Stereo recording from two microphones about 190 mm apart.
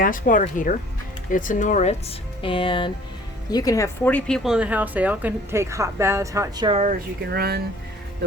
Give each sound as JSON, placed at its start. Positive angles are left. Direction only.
{"t": 0.0, "sound": "speech", "side_deg": 45}
{"t": 4.4, "sound": "speech", "side_deg": -5}
{"t": 6.7, "sound": "speech", "side_deg": -40}
{"t": 7.3, "sound": "speech", "side_deg": -55}